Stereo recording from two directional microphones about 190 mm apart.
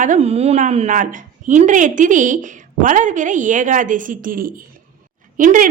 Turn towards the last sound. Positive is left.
turn(degrees=-45)  # may be behind; listen again after turning